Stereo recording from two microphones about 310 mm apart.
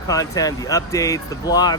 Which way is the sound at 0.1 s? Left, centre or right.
Centre.